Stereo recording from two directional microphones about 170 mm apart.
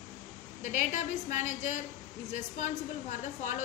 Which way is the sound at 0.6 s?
45° left (ahead or behind).